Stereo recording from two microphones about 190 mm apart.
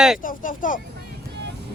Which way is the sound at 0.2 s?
45° left (ahead or behind).